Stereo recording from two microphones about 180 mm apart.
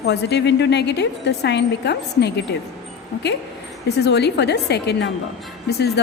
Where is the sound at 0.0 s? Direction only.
70° left (ahead or behind).